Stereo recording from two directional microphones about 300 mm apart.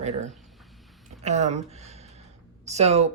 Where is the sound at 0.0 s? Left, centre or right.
Right.